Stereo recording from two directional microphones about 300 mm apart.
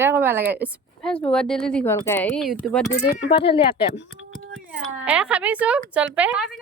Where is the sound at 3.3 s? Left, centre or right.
Centre.